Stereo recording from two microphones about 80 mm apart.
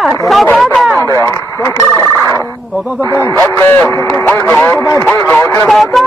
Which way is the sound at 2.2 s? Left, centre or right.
Right.